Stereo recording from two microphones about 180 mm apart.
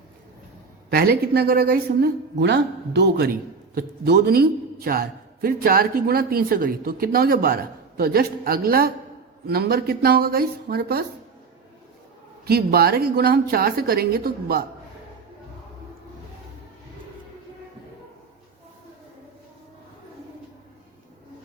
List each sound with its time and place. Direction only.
0.9 s a man's voice: 60° right (ahead or behind)
12.5 s a man's voice: 60° right (ahead or behind)